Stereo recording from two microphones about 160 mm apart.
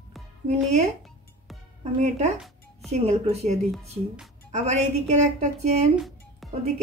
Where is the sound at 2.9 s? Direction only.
40° right (ahead or behind).